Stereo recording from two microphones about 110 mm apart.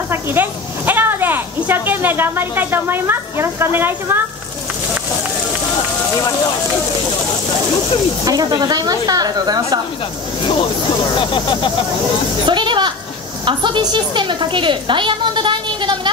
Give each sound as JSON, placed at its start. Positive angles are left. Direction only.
{"t": 0.1, "sound": "speech", "side_deg": -20}
{"t": 8.3, "sound": "speech", "side_deg": -35}
{"t": 10.4, "sound": "speech", "side_deg": 55}
{"t": 12.4, "sound": "a woman's voice", "side_deg": -45}